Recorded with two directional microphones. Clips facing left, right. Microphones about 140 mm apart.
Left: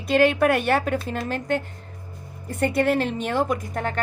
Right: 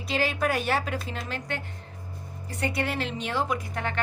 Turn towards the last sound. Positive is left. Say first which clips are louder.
# left 4 dB
turn(degrees=45)  # may be behind; listen again after turning